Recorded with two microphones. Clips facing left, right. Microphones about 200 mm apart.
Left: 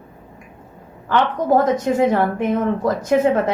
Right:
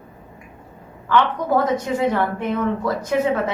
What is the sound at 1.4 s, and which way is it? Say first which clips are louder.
A woman's voice: left 3 dB; 45° left (ahead or behind).